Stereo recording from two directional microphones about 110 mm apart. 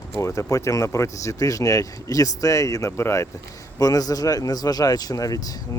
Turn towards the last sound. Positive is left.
turn(degrees=35)  # may be behind; listen again after turning